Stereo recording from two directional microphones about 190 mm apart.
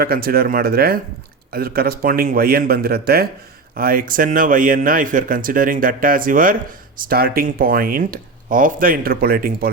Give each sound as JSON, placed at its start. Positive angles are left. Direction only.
{"t": 0.0, "sound": "speech", "side_deg": -55}